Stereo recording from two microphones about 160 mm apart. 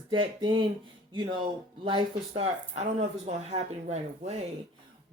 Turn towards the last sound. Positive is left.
turn(degrees=-40)  # may be behind; listen again after turning